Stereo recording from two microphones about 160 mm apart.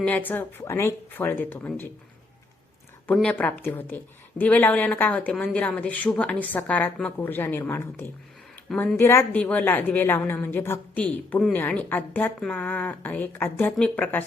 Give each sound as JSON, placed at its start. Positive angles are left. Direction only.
{"t": 0.0, "sound": "a woman's voice", "side_deg": 10}
{"t": 3.1, "sound": "a woman's voice", "side_deg": 10}